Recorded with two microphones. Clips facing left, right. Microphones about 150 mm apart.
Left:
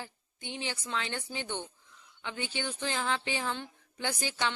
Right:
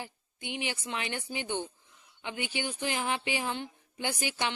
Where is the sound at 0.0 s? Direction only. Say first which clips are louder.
Right 2 dB; 15° right (ahead or behind).